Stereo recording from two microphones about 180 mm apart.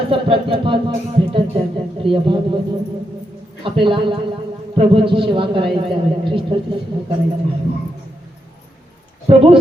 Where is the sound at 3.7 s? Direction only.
30° right (ahead or behind).